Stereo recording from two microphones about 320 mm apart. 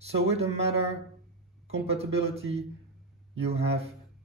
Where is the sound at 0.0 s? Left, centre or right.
Centre.